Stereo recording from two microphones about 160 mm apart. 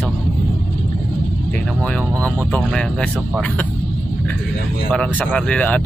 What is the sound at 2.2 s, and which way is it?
Speech, 5° left (ahead or behind).